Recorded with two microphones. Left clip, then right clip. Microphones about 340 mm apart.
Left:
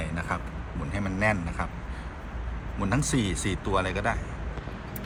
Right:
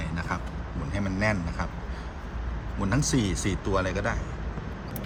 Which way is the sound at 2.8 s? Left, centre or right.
Centre.